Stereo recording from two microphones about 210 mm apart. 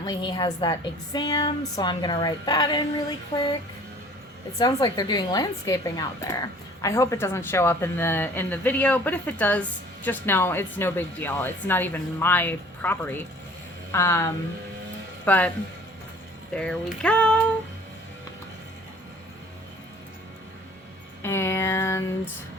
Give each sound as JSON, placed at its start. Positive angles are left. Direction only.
{"t": 0.0, "sound": "a woman's voice", "side_deg": 20}
{"t": 4.6, "sound": "speech", "side_deg": 20}
{"t": 16.6, "sound": "speech", "side_deg": 5}
{"t": 21.2, "sound": "a sound", "side_deg": 10}